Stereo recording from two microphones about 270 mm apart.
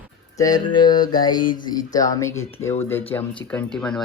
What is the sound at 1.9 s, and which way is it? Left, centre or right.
Speech, centre.